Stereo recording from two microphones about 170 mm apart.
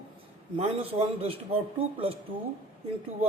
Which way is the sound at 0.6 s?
35° right (ahead or behind).